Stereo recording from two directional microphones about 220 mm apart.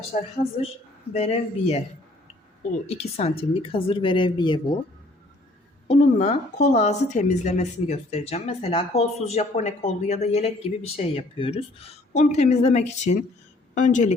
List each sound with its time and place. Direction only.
1.1 s a woman's voice: 30° left (ahead or behind)
2.8 s a woman's voice: 30° left (ahead or behind)
5.9 s a woman's voice: 30° left (ahead or behind)